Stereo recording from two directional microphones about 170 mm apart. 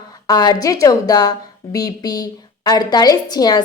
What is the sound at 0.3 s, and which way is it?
A woman's voice, 25° left (ahead or behind).